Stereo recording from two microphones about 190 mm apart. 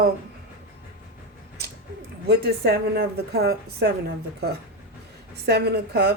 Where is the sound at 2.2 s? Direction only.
60° right (ahead or behind).